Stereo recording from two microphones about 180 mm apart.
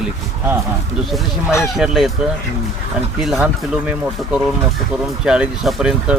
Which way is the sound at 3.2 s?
Centre (ahead or behind).